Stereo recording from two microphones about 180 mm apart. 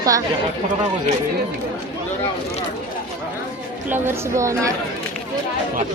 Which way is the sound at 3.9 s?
15° right (ahead or behind).